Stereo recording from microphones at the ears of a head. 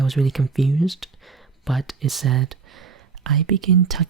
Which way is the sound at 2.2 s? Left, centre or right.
Right.